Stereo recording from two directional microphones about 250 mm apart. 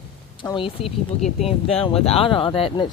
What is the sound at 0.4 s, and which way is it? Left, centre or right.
Speech, left.